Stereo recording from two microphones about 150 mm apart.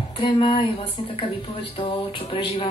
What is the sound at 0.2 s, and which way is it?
Speech, 35° left (ahead or behind).